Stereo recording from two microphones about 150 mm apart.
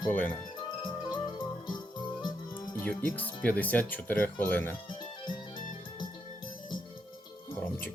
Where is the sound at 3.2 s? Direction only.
10° left (ahead or behind).